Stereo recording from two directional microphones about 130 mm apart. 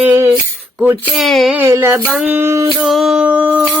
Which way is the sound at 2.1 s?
5° right (ahead or behind).